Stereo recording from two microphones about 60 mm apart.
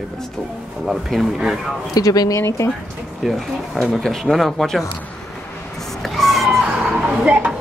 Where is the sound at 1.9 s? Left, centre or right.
Left.